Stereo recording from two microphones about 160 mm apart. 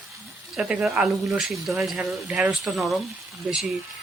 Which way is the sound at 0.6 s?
5° right (ahead or behind).